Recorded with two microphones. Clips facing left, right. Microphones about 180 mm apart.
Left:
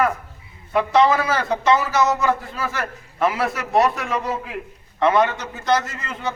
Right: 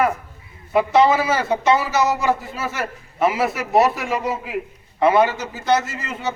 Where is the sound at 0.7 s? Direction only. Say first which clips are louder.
Right 1 dB; 5° right (ahead or behind).